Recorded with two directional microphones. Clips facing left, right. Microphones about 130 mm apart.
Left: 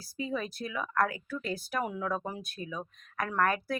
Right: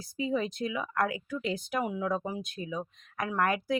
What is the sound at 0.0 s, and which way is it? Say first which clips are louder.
Speech: right 4 dB; 20° right (ahead or behind).